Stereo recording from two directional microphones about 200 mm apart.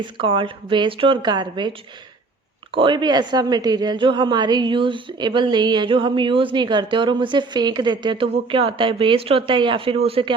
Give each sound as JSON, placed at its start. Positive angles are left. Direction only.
{"t": 0.0, "sound": "a woman's voice", "side_deg": -25}
{"t": 2.7, "sound": "a woman's voice", "side_deg": -25}